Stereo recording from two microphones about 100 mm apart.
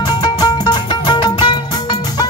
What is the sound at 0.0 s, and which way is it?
Music, 45° left (ahead or behind).